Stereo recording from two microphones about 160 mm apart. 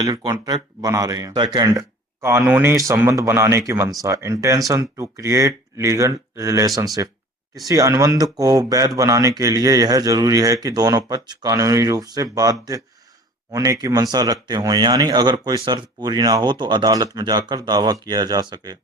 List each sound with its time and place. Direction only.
0.0 s a man's voice: 25° right (ahead or behind)